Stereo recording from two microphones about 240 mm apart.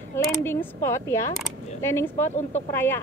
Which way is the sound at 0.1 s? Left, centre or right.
Centre.